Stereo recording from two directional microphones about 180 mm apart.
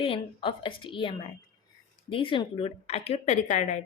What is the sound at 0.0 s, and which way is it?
A woman's voice, 30° left (ahead or behind).